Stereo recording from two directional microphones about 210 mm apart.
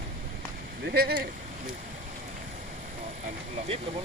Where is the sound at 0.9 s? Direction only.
50° right (ahead or behind).